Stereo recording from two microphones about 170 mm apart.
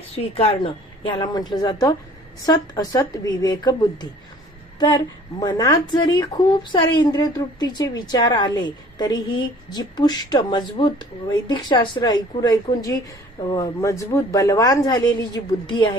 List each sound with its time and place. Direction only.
0.1 s a woman's voice: 35° left (ahead or behind)